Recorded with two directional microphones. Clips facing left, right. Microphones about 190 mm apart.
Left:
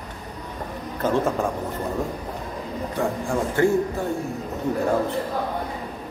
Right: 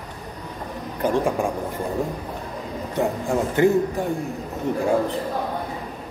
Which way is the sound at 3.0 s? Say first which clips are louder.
Right 2 dB; 20° right (ahead or behind).